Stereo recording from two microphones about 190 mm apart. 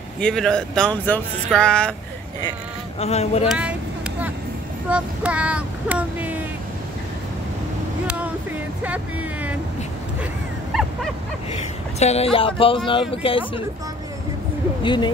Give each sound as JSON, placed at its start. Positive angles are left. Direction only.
{"t": 0.2, "sound": "speech", "side_deg": 5}
{"t": 3.0, "sound": "speech", "side_deg": 35}
{"t": 3.4, "sound": "speech", "side_deg": -5}
{"t": 4.8, "sound": "speech", "side_deg": -5}
{"t": 8.8, "sound": "speech", "side_deg": -10}
{"t": 12.0, "sound": "speech", "side_deg": 35}
{"t": 14.8, "sound": "speech", "side_deg": 25}